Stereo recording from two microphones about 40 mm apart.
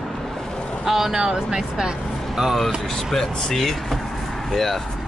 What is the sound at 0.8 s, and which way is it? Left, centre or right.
Speech, centre.